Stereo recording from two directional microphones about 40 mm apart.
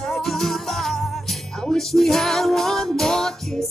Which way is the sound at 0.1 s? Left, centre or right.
Centre.